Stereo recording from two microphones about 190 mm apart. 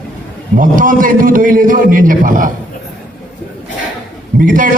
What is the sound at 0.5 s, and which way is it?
A man's voice, 45° right (ahead or behind).